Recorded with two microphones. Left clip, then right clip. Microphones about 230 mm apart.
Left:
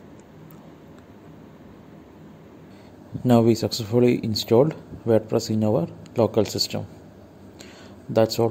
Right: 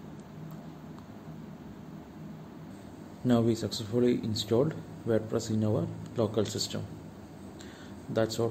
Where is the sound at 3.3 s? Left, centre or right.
Left.